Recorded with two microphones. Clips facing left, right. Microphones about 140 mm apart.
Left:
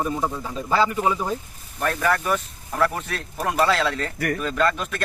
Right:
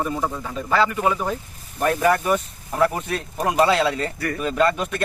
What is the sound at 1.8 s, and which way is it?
Speech, 15° right (ahead or behind).